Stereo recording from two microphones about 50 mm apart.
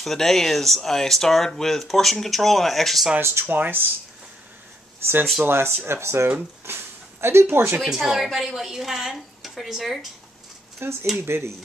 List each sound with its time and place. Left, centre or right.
0.0 s speech: centre
3.2 s speech: right
3.4 s speech: right
5.0 s speech: right
7.8 s a woman's voice: centre
10.8 s speech: right